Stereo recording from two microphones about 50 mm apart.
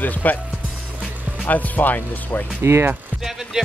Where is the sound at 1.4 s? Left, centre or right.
Left.